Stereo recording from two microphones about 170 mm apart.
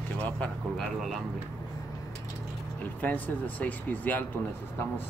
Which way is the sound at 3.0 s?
10° left (ahead or behind).